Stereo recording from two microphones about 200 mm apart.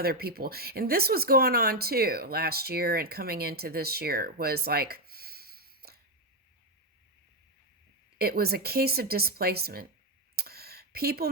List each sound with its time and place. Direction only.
0.0 s speech: 50° right (ahead or behind)
8.2 s speech: 50° right (ahead or behind)
10.3 s a sound: 50° right (ahead or behind)